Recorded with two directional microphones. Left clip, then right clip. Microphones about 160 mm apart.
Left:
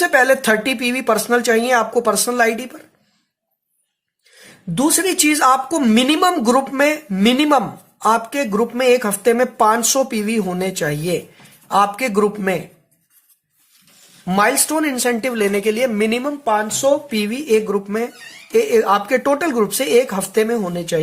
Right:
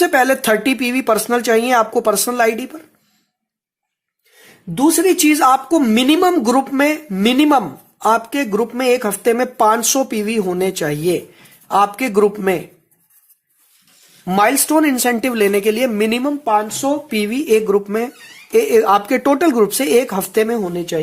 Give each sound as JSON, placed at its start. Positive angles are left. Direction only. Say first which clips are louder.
{"t": 0.0, "sound": "speech", "louder": "even", "side_deg": -30}
{"t": 4.7, "sound": "a woman's voice", "louder": "right 4 dB", "side_deg": -5}
{"t": 14.3, "sound": "speech", "louder": "right 2 dB", "side_deg": -35}
{"t": 16.4, "sound": "a woman's voice", "louder": "left 1 dB", "side_deg": -20}
{"t": 17.1, "sound": "speech", "louder": "right 2 dB", "side_deg": -35}
{"t": 20.7, "sound": "speech", "louder": "even", "side_deg": -15}